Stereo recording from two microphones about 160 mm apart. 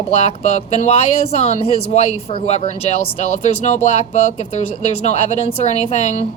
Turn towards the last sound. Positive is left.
turn(degrees=40)  # may be behind; listen again after turning